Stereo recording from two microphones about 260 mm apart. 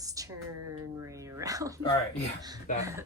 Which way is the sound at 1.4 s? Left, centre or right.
Centre.